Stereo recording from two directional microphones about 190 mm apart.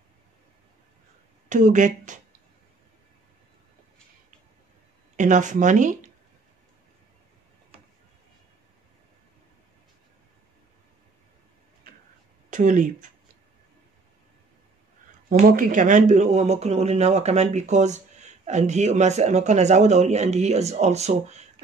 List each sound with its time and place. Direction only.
1.5 s speech: 40° right (ahead or behind)
5.1 s speech: 40° right (ahead or behind)
12.4 s speech: 45° right (ahead or behind)
15.2 s speech: 45° right (ahead or behind)